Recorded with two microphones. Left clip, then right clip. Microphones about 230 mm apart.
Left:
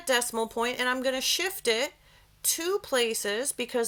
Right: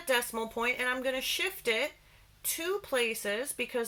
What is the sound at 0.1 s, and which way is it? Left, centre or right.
Speech, left.